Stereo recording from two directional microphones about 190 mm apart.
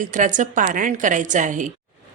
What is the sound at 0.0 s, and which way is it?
A woman's voice, 40° right (ahead or behind).